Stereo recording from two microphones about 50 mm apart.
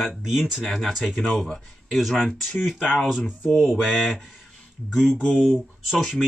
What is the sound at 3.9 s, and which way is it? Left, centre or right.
Speech, centre.